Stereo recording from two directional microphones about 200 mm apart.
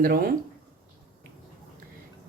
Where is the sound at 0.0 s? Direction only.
50° right (ahead or behind).